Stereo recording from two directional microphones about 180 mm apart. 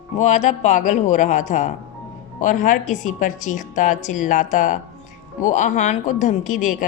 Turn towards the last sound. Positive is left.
turn(degrees=45)  # may be behind; listen again after turning